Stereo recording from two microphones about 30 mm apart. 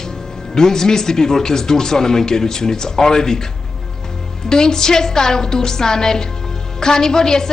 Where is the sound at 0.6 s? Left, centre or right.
Centre.